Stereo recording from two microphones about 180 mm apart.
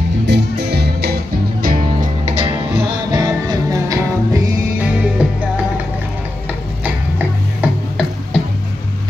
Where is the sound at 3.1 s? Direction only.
20° right (ahead or behind).